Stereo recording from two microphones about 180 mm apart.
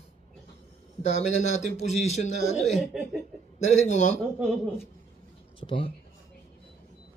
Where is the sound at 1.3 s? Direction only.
40° left (ahead or behind).